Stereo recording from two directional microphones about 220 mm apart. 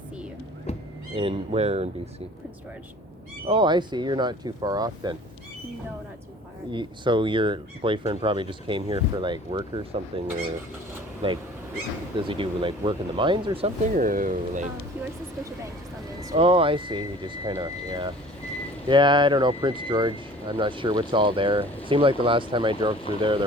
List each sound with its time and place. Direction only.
1.1 s speech: 25° right (ahead or behind)
3.4 s speech: 20° right (ahead or behind)
6.7 s speech: 20° right (ahead or behind)
13.9 s speech: 40° right (ahead or behind)
16.3 s speech: 25° right (ahead or behind)